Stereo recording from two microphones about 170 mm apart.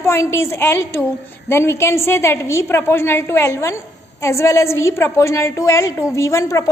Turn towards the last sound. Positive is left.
turn(degrees=20)  # may be behind; listen again after turning